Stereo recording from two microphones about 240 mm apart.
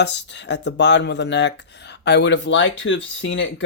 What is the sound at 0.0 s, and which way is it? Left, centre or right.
Speech, left.